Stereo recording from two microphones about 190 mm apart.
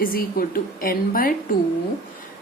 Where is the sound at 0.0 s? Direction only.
50° left (ahead or behind).